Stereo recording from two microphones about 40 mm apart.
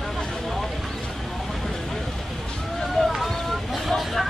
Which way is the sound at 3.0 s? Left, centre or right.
Left.